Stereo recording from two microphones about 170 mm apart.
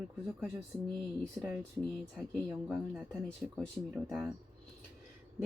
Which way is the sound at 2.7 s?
Centre (ahead or behind).